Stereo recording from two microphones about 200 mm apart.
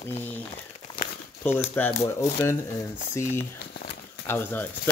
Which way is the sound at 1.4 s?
10° left (ahead or behind).